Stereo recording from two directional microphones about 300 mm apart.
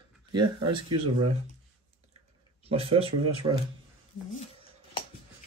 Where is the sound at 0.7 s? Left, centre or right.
Centre.